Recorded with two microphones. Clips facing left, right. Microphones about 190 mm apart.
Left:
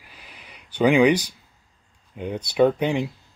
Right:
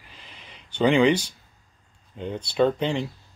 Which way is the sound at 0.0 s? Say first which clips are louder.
Left 1 dB; 10° left (ahead or behind).